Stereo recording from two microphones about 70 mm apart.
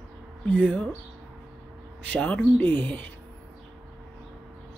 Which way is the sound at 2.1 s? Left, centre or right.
Centre.